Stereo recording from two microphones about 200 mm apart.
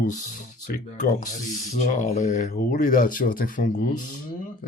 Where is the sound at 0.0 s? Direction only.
45° left (ahead or behind).